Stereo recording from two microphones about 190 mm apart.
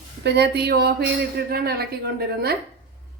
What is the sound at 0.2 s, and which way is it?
Speech, 60° right (ahead or behind).